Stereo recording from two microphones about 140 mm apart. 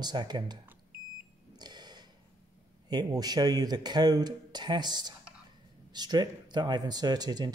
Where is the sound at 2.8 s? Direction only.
30° right (ahead or behind).